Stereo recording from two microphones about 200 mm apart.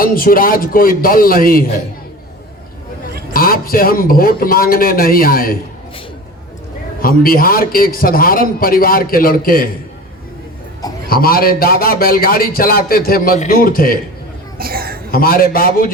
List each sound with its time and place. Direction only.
0.0 s a man's voice: 45° left (ahead or behind)
3.3 s a man's voice: 45° left (ahead or behind)
7.0 s a man's voice: 45° left (ahead or behind)
11.1 s a man's voice: 45° left (ahead or behind)
14.6 s a woman's voice: 50° right (ahead or behind)
15.1 s a man's voice: 45° left (ahead or behind)